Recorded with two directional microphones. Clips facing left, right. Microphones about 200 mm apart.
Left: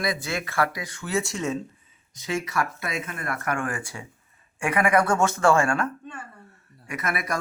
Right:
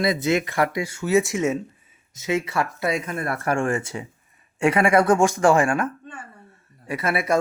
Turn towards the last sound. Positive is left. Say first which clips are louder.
# right 6 dB
turn(degrees=-30)  # may be behind; listen again after turning